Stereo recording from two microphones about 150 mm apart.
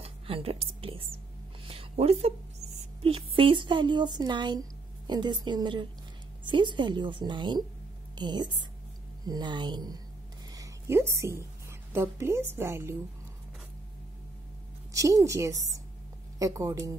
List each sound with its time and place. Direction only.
0.0 s a woman's voice: 40° right (ahead or behind)
10.5 s a sound: 20° right (ahead or behind)
11.9 s a woman's voice: 15° right (ahead or behind)
14.9 s a woman's voice: 20° right (ahead or behind)